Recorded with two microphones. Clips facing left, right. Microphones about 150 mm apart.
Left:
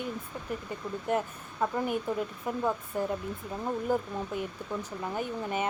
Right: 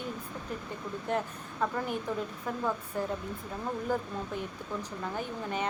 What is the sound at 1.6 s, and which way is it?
Speech, 15° left (ahead or behind).